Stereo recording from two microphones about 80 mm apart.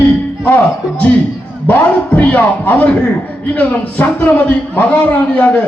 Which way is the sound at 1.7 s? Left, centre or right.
Centre.